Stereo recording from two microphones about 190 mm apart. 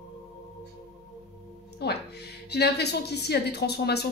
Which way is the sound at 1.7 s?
60° left (ahead or behind).